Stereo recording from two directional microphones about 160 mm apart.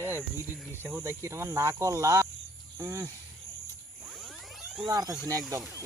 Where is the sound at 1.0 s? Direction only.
20° right (ahead or behind).